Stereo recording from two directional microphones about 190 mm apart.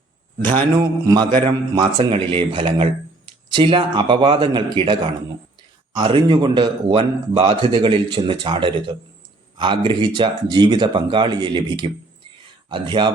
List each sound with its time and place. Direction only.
0.8 s speech: 20° right (ahead or behind)